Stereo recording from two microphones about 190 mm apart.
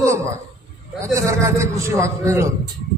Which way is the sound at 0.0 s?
15° right (ahead or behind).